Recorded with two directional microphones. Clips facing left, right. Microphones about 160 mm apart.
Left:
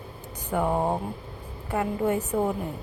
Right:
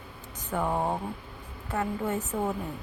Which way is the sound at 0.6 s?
25° left (ahead or behind).